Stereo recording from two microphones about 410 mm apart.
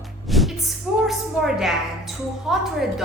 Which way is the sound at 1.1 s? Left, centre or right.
Centre.